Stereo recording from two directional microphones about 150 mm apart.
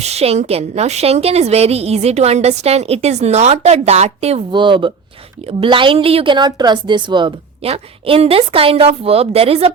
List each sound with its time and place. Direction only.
0.0 s a woman's voice: 45° right (ahead or behind)